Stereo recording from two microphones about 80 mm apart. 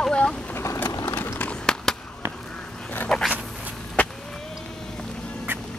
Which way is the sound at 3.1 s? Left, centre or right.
Centre.